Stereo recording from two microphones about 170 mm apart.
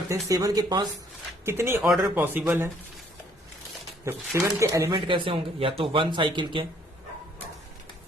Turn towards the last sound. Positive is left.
turn(degrees=-30)  # may be behind; listen again after turning